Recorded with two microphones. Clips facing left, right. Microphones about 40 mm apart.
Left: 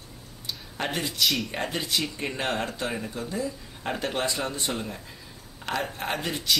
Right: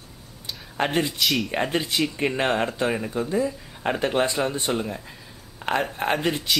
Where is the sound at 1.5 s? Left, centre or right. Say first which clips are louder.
Right 5 dB; right.